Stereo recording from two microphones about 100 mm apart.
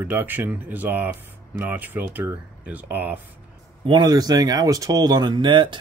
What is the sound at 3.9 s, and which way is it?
Speech, 45° right (ahead or behind).